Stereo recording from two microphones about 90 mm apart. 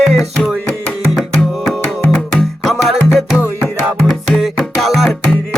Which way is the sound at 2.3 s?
Centre (ahead or behind).